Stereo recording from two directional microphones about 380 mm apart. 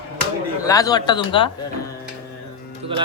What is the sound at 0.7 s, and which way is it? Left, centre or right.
Speech, centre.